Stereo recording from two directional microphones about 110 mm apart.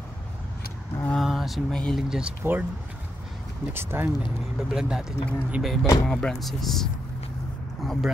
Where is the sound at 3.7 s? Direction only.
20° right (ahead or behind).